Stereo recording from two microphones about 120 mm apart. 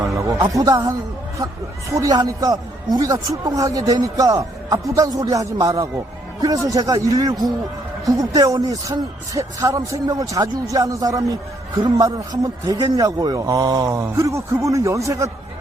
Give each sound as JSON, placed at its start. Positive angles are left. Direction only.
{"t": 0.0, "sound": "speech", "side_deg": -25}
{"t": 2.0, "sound": "speech", "side_deg": -30}